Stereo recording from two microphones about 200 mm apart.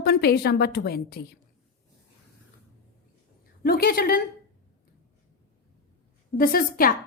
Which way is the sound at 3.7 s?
50° left (ahead or behind).